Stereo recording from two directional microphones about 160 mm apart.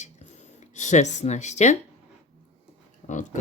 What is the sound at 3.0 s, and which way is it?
Speech, 50° left (ahead or behind).